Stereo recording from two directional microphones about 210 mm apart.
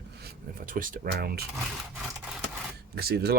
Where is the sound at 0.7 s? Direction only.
40° right (ahead or behind).